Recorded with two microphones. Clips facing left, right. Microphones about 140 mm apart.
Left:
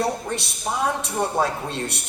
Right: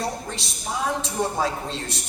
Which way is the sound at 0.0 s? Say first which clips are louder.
Left 5 dB; 60° left (ahead or behind).